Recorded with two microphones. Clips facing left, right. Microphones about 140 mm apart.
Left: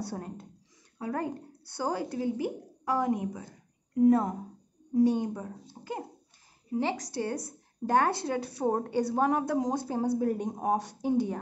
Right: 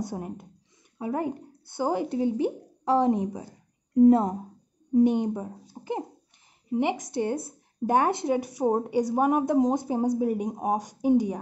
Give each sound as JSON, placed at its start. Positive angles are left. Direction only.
{"t": 0.0, "sound": "a woman's voice", "side_deg": -15}
{"t": 4.9, "sound": "a woman's voice", "side_deg": -20}
{"t": 5.8, "sound": "babbling", "side_deg": -25}
{"t": 6.7, "sound": "speech", "side_deg": -20}